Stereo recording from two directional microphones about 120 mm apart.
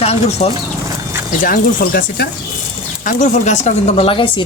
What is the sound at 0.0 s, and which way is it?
Speech, 60° left (ahead or behind).